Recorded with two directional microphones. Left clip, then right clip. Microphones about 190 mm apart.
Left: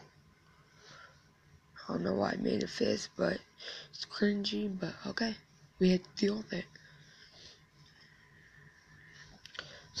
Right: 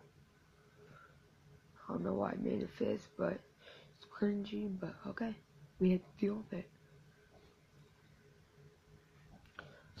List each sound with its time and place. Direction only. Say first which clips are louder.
1.9 s speech: left 5 dB; 15° left (ahead or behind)